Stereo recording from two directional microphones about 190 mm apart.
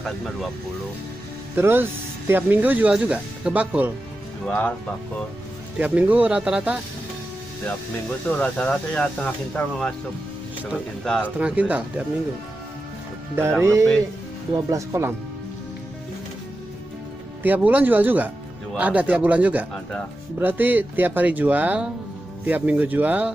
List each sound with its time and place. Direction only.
1.5 s speech: 10° right (ahead or behind)
4.5 s speech: 5° left (ahead or behind)
5.8 s speech: 5° right (ahead or behind)
8.3 s speech: 5° left (ahead or behind)
11.3 s speech: 5° right (ahead or behind)
13.4 s speech: 15° right (ahead or behind)
17.4 s speech: 10° right (ahead or behind)